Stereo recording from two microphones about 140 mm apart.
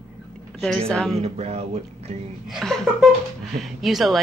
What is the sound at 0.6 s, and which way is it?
Speech, 5° left (ahead or behind).